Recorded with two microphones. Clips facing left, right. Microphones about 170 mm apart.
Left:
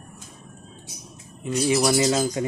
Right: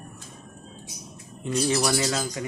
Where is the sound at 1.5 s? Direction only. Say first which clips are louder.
Left 4 dB; 10° left (ahead or behind).